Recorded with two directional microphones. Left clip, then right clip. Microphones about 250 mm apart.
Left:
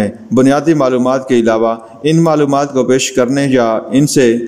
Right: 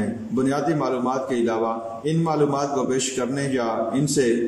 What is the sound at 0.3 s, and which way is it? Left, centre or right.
A man's voice, left.